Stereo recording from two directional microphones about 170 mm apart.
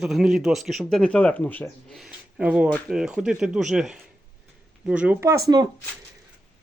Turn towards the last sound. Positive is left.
turn(degrees=-20)  # may be behind; listen again after turning